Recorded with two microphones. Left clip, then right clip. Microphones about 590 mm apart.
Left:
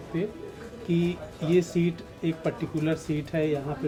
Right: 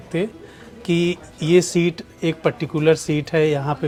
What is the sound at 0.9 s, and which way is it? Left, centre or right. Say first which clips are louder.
Speech: right 8 dB; right.